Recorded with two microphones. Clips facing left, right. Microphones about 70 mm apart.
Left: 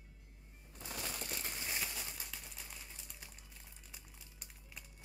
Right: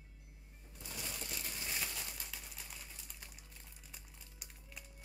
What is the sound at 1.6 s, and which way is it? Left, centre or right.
Crumpling, centre.